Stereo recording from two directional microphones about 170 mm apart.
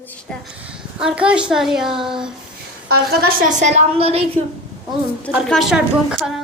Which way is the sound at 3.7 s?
40° right (ahead or behind).